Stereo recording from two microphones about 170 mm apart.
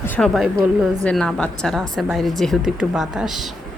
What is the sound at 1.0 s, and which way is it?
A woman's voice, 5° left (ahead or behind).